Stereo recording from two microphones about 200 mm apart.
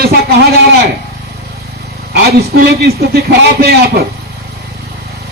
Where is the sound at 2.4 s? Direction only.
50° right (ahead or behind).